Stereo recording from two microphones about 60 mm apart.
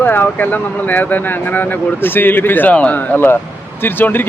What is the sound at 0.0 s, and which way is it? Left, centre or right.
Speech, left.